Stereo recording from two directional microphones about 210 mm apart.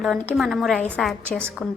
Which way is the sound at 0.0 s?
Centre (ahead or behind).